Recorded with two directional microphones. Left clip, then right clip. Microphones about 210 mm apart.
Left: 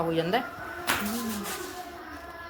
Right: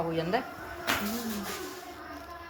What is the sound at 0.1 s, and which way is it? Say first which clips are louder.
Speech: left 3 dB; 20° left (ahead or behind).